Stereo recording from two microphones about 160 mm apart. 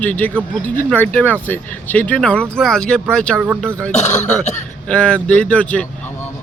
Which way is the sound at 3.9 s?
45° left (ahead or behind).